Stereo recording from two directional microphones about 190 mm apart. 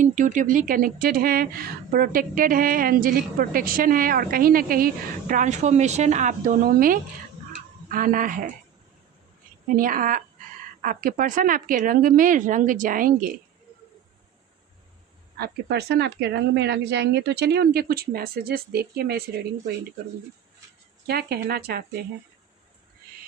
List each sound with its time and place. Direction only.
0.0 s a woman's voice: 40° right (ahead or behind)
9.7 s a woman's voice: 45° right (ahead or behind)
15.4 s speech: 60° right (ahead or behind)
21.1 s speech: 55° right (ahead or behind)